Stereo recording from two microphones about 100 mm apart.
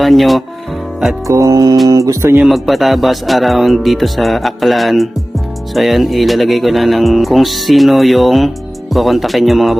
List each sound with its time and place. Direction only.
0.0 s speech: centre (ahead or behind)
1.2 s music: 30° right (ahead or behind)
2.3 s speech: centre (ahead or behind)